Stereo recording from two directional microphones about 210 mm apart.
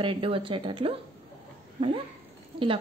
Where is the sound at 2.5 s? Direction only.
25° right (ahead or behind).